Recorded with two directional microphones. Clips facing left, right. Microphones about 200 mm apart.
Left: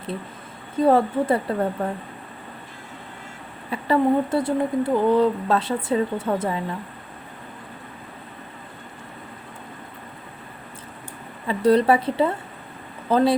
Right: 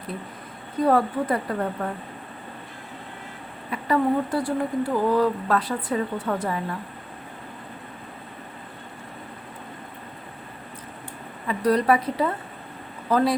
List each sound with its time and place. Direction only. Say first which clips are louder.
0.8 s speech: left 3 dB; 25° left (ahead or behind)
3.7 s speech: left 3 dB; 25° left (ahead or behind)
11.4 s speech: left 3 dB; 25° left (ahead or behind)